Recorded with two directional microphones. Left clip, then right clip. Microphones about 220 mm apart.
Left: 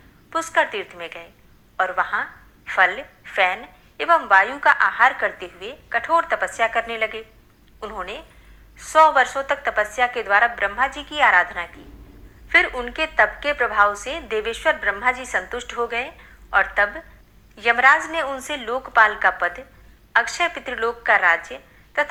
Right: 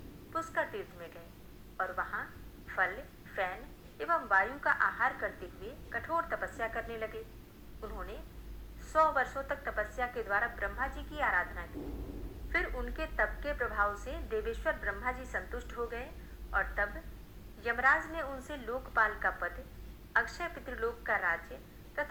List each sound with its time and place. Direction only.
0.3 s a woman's voice: 65° left (ahead or behind)
2.6 s a woman's voice: 60° left (ahead or behind)
6.6 s a woman's voice: 60° left (ahead or behind)
9.0 s a woman's voice: 70° left (ahead or behind); by 10.9 s 50° left (ahead or behind)
10.9 s a woman's voice: 65° left (ahead or behind)
13.7 s a woman's voice: 45° left (ahead or behind)
14.0 s a woman's voice: 65° left (ahead or behind)
19.3 s a woman's voice: 50° left (ahead or behind)
20.1 s a woman's voice: 70° left (ahead or behind)
20.5 s a woman's voice: 50° left (ahead or behind)